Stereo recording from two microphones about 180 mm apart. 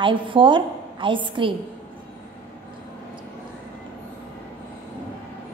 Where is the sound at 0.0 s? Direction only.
25° right (ahead or behind).